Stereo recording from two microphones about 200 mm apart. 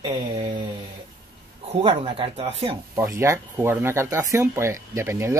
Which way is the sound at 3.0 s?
15° right (ahead or behind).